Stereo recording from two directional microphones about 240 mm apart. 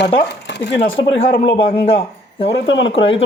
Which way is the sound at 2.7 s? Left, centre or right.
Left.